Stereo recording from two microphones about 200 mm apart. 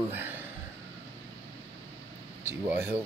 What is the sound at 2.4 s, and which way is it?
Speech, 10° right (ahead or behind).